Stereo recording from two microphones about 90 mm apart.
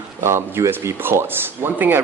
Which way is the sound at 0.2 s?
25° right (ahead or behind).